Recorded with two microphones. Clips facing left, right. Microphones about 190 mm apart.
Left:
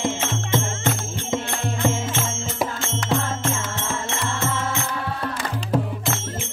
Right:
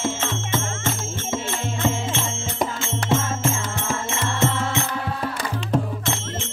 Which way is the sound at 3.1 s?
5° right (ahead or behind).